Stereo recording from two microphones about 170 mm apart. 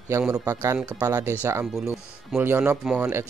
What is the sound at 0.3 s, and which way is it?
Speech, 15° right (ahead or behind).